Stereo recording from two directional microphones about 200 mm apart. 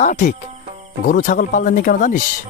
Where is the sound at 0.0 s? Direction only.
40° left (ahead or behind).